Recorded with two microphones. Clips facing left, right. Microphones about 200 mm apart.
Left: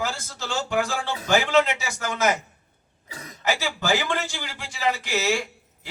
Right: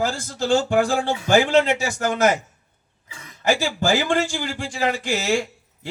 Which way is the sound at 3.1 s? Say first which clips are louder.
Left 4 dB; 35° left (ahead or behind).